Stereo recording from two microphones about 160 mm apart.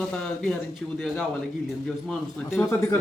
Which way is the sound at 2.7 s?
15° left (ahead or behind).